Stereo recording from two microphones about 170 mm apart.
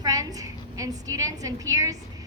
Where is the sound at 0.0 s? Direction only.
20° right (ahead or behind).